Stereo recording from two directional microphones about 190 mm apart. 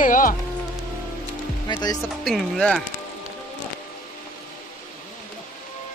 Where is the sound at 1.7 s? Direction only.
20° left (ahead or behind).